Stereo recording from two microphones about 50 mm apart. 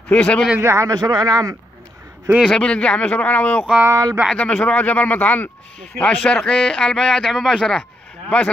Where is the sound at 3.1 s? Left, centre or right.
Left.